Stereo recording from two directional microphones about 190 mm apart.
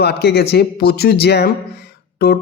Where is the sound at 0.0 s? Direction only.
60° left (ahead or behind).